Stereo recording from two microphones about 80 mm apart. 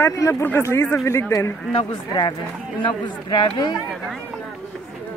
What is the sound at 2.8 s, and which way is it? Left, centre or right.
Speech, left.